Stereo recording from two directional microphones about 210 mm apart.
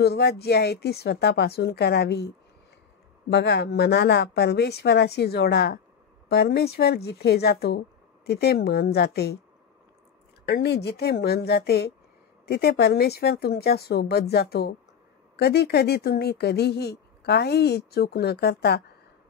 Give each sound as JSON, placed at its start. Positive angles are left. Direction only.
{"t": 0.0, "sound": "speech", "side_deg": 50}
{"t": 10.4, "sound": "speech", "side_deg": 55}